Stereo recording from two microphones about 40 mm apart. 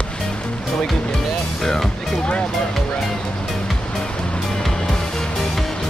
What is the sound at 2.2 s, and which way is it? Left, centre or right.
Music, left.